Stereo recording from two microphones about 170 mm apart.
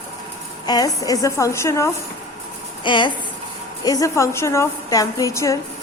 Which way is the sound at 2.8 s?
25° left (ahead or behind).